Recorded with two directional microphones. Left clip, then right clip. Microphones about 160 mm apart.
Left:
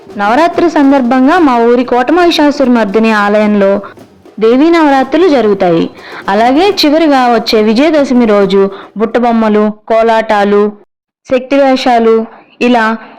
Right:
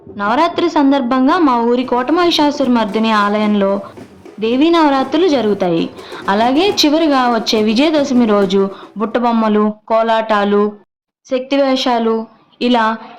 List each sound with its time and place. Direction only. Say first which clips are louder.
0.2 s a woman's voice: left 6 dB; 30° left (ahead or behind)